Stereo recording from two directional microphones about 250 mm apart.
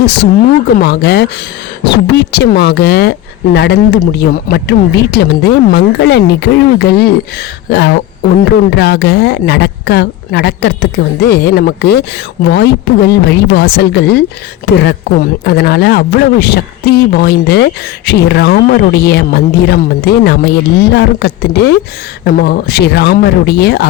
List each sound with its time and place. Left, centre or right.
0.0 s a woman's voice: left
7.7 s beatboxing: left
8.8 s a woman's voice: left